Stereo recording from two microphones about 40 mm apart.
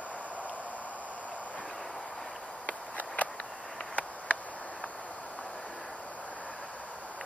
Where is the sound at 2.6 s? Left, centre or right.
Left.